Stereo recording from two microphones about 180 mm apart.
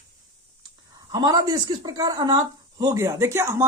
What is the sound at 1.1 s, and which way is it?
Speech, 20° right (ahead or behind).